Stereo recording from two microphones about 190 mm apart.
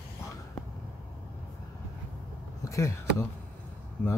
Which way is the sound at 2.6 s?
15° left (ahead or behind).